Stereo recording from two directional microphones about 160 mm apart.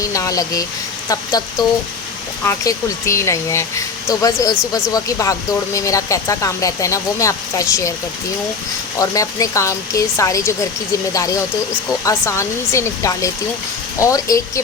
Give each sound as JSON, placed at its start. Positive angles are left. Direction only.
{"t": 0.0, "sound": "speech", "side_deg": 20}
{"t": 9.0, "sound": "speech", "side_deg": 20}
{"t": 12.0, "sound": "speech", "side_deg": 15}